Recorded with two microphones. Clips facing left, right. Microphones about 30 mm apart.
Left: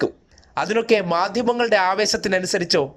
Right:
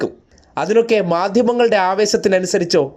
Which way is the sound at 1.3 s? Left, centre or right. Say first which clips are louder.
Right 6 dB; left.